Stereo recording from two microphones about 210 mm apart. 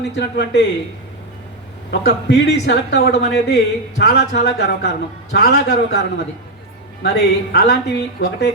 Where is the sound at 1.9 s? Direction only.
50° left (ahead or behind).